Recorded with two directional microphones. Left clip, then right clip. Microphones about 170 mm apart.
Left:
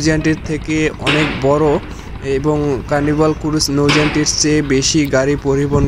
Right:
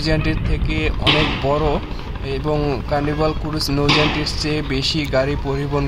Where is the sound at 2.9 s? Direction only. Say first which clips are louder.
Left 6 dB; 20° left (ahead or behind).